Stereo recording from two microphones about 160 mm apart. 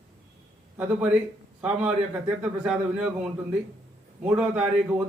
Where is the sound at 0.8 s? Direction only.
10° right (ahead or behind).